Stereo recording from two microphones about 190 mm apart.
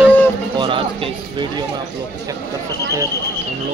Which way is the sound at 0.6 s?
25° right (ahead or behind).